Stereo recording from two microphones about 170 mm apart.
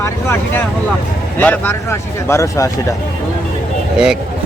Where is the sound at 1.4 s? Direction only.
10° left (ahead or behind).